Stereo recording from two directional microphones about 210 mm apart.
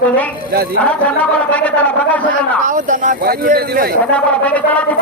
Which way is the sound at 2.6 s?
40° right (ahead or behind).